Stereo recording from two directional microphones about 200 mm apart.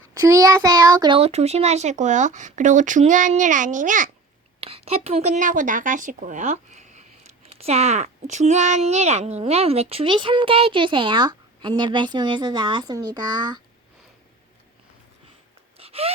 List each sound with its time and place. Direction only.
0.1 s a child's voice: 15° right (ahead or behind)
15.8 s gasp: 30° right (ahead or behind)